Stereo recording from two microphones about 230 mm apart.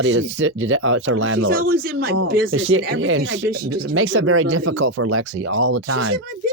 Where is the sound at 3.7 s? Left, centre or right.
Right.